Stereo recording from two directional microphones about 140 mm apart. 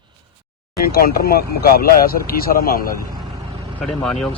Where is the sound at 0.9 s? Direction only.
90° left.